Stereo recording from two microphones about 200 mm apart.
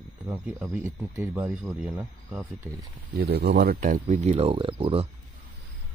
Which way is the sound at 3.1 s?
55° right (ahead or behind).